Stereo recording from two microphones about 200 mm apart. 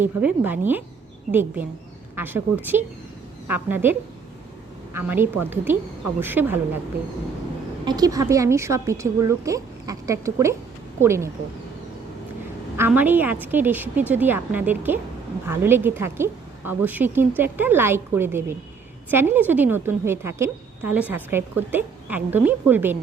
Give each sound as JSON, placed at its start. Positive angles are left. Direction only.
{"t": 0.0, "sound": "a woman's voice", "side_deg": -10}
{"t": 3.4, "sound": "a woman's voice", "side_deg": -10}
{"t": 4.9, "sound": "a woman's voice", "side_deg": -10}
{"t": 7.9, "sound": "a woman's voice", "side_deg": -20}
{"t": 12.7, "sound": "a woman's voice", "side_deg": -10}